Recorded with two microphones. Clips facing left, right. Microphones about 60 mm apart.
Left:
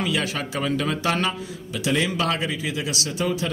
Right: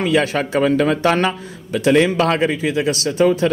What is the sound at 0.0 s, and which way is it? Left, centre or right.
Speech, right.